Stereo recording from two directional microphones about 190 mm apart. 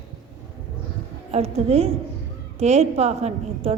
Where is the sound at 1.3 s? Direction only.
35° right (ahead or behind).